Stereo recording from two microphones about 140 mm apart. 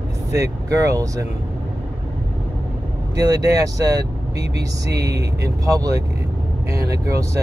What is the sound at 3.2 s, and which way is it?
Speech, 25° right (ahead or behind).